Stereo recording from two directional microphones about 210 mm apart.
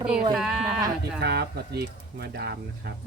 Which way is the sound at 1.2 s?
50° right (ahead or behind).